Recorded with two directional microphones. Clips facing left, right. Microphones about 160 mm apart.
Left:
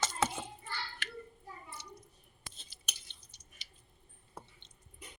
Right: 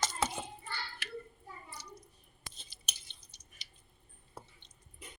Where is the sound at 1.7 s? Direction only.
25° left (ahead or behind).